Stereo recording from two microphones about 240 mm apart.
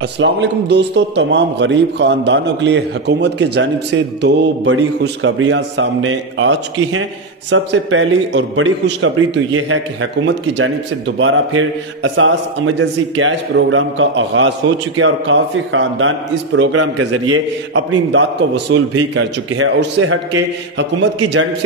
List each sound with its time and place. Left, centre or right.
0.2 s a man's voice: right